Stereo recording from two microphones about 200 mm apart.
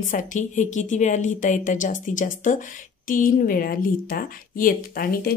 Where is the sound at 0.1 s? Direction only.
40° left (ahead or behind).